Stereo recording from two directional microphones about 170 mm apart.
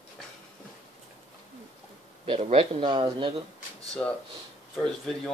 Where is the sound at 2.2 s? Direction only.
35° right (ahead or behind).